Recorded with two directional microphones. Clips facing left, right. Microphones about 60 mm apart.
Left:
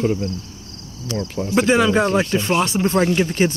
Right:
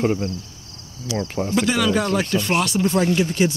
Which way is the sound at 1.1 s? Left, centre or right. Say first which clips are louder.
Even; left.